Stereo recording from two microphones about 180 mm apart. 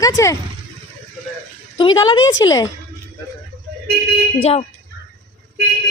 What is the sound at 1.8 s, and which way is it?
Speech, 25° left (ahead or behind).